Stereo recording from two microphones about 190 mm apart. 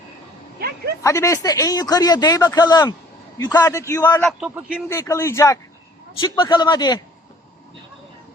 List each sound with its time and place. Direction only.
1.0 s a man's voice: 15° left (ahead or behind)
4.2 s a man's voice: centre (ahead or behind)
4.9 s a man's voice: 15° left (ahead or behind)